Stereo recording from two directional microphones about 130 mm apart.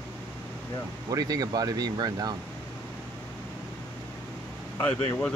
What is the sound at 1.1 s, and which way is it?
Speech, 30° right (ahead or behind).